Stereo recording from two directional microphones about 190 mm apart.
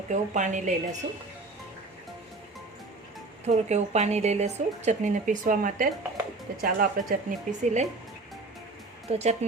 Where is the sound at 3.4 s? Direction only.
35° right (ahead or behind).